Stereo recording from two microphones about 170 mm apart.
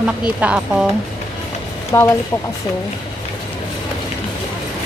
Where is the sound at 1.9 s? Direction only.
15° left (ahead or behind).